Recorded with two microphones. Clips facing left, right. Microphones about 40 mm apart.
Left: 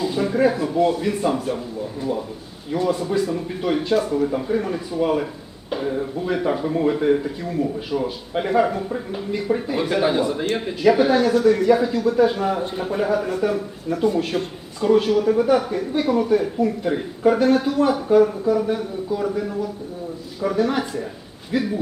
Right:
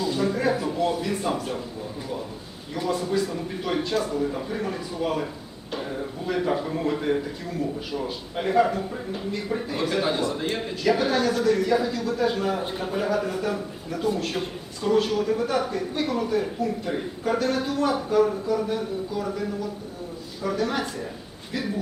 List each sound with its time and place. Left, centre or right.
0.0 s a sound: centre
0.5 s speech: centre
2.7 s a man's voice: centre
14.8 s a man's voice: centre